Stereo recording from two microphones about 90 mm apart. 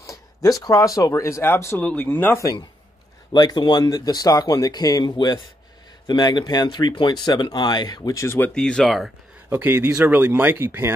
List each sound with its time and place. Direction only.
0.0 s speech: 40° left (ahead or behind)
1.8 s speech: 15° left (ahead or behind)
3.3 s speech: 50° left (ahead or behind)
8.1 s speech: 35° left (ahead or behind)
8.5 s speech: 10° left (ahead or behind)
9.5 s speech: 20° right (ahead or behind)